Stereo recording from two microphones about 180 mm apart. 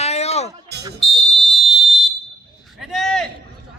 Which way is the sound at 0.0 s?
35° left (ahead or behind).